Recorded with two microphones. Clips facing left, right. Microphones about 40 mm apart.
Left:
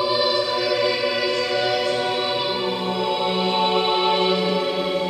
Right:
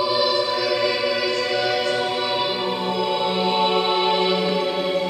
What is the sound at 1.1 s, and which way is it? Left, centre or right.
Music, left.